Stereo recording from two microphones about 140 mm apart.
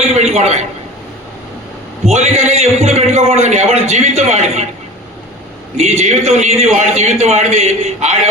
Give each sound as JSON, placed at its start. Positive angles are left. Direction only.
{"t": 0.2, "sound": "a sound", "side_deg": -50}
{"t": 2.1, "sound": "a man's voice", "side_deg": -55}
{"t": 5.7, "sound": "a man's voice", "side_deg": -50}